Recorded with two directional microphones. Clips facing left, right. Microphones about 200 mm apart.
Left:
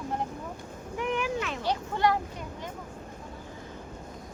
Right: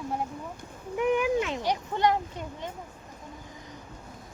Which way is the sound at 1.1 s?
20° right (ahead or behind).